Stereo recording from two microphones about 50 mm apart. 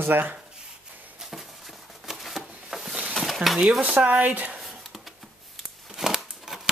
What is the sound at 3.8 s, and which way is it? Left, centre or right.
Speech, right.